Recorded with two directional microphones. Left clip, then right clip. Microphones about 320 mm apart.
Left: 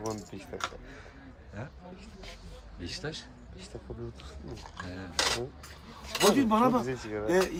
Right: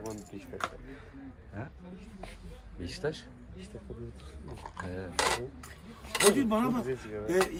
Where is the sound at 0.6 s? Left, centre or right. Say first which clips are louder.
Even; right.